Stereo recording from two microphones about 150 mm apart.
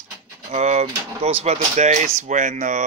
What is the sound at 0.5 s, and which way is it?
Speech, 50° right (ahead or behind).